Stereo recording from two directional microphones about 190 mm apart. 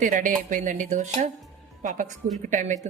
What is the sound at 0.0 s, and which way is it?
A woman's voice, 45° right (ahead or behind).